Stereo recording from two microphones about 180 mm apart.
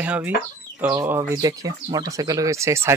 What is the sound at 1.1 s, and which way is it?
Speech, 20° right (ahead or behind).